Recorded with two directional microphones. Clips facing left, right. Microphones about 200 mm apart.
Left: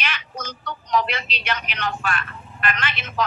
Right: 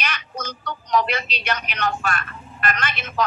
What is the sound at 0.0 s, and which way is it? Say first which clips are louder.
Speech: right 1 dB; 45° right (ahead or behind).